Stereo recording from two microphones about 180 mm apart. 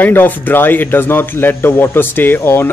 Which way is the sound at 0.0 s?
10° left (ahead or behind).